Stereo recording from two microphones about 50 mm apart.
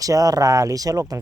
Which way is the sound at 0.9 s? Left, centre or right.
Right.